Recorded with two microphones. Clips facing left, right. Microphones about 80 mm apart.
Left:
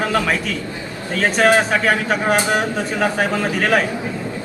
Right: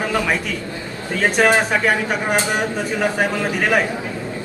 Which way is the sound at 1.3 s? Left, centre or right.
Centre.